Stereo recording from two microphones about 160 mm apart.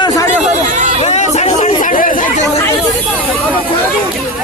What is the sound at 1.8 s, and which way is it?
Speech, 60° left (ahead or behind).